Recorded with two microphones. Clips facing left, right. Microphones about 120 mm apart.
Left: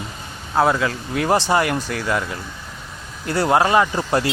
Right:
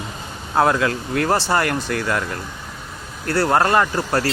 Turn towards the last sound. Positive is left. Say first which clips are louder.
# even
turn(degrees=15)  # may be behind; listen again after turning